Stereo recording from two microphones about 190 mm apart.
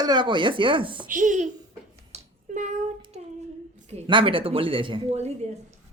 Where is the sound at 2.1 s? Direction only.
40° right (ahead or behind).